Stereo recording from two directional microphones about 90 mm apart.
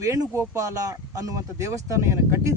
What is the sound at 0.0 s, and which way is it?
Speech, 35° right (ahead or behind).